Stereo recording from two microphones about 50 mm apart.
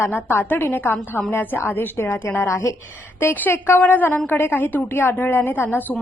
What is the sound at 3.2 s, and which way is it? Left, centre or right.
A woman's voice, left.